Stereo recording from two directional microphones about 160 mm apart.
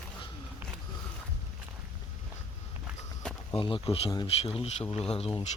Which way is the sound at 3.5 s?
35° left (ahead or behind).